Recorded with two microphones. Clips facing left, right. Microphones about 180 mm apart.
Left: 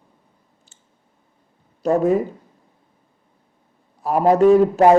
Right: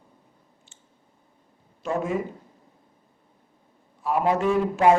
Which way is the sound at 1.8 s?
40° left (ahead or behind).